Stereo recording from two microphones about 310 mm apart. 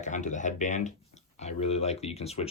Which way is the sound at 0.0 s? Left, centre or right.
Left.